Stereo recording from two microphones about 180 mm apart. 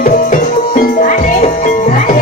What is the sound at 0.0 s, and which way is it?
Music, 50° left (ahead or behind).